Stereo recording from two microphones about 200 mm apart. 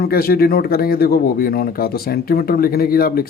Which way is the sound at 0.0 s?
50° left (ahead or behind).